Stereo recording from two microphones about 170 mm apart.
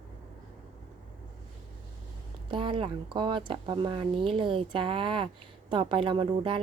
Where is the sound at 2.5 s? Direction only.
30° right (ahead or behind).